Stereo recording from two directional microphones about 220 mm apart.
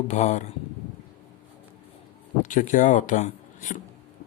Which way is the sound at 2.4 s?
35° left (ahead or behind).